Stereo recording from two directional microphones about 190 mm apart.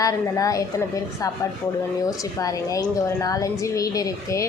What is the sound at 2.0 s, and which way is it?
A woman's voice, 20° left (ahead or behind).